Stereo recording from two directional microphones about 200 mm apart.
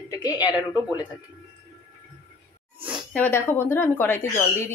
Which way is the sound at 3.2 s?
10° left (ahead or behind).